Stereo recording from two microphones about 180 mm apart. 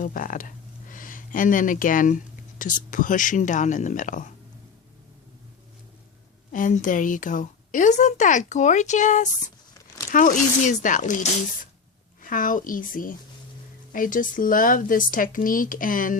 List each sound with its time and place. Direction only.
0.0 s speech: 50° left (ahead or behind)
6.5 s a woman's voice: 45° left (ahead or behind)